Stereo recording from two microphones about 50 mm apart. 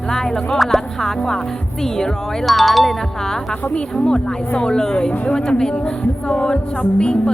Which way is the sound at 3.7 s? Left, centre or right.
Centre.